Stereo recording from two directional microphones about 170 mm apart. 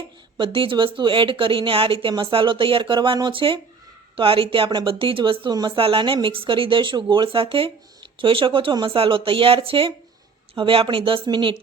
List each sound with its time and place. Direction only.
0.3 s speech: 30° right (ahead or behind)